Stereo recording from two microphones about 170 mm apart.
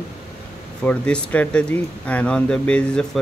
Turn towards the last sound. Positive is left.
turn(degrees=5)  # may be behind; listen again after turning